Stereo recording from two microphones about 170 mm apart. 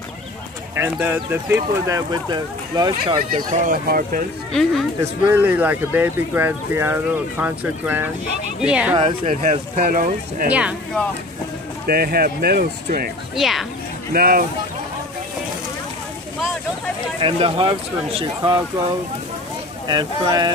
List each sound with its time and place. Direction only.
0.7 s speech: 10° right (ahead or behind)
3.4 s speech: 50° right (ahead or behind)
4.5 s speech: centre (ahead or behind)
5.3 s speech: 10° right (ahead or behind)
8.9 s speech: 30° right (ahead or behind)
9.3 s speech: 45° right (ahead or behind)
9.8 s speech: 55° right (ahead or behind)
10.5 s speech: 10° right (ahead or behind)
11.9 s speech: 60° right (ahead or behind)
13.4 s speech: centre (ahead or behind)
14.1 s speech: 60° right (ahead or behind)
17.2 s speech: 30° right (ahead or behind)
19.9 s speech: 25° right (ahead or behind)